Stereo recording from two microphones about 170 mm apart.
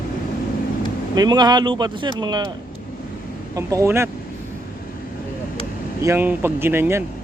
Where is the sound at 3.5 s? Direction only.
15° right (ahead or behind).